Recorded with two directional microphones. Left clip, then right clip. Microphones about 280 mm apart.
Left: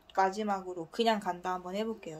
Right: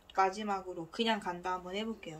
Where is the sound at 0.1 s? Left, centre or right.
Left.